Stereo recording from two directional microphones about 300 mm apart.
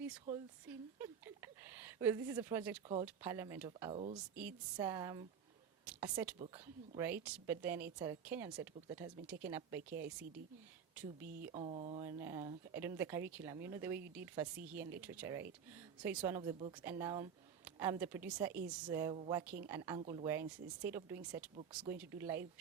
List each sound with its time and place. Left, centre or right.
0.7 s speech: centre
11.3 s speech: right
12.0 s speech: centre